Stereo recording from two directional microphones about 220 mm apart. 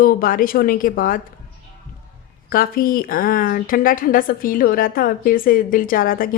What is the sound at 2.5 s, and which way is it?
Speech, 40° left (ahead or behind).